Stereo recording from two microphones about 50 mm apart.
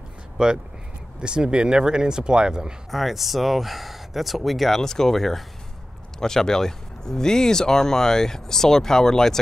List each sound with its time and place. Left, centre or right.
0.4 s speech: centre
2.9 s speech: centre